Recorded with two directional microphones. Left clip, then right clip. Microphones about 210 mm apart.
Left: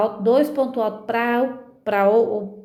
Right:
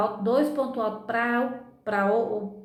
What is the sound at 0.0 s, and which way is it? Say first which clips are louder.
A woman's voice: left 6 dB; 35° left (ahead or behind).